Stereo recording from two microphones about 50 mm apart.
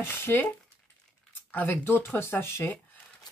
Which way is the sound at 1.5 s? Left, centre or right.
Left.